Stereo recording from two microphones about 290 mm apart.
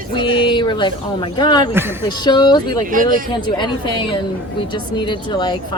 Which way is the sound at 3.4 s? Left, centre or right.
Centre.